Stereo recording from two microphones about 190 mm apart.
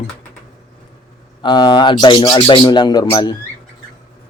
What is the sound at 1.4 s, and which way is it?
Speech, 25° left (ahead or behind).